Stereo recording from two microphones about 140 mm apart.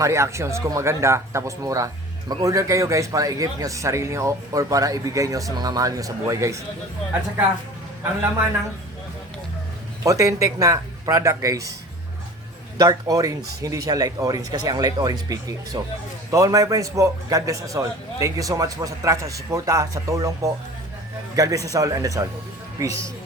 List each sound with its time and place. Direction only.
0.0 s a man's voice: 20° right (ahead or behind)
10.0 s a man's voice: 25° right (ahead or behind)
12.7 s a man's voice: 25° right (ahead or behind)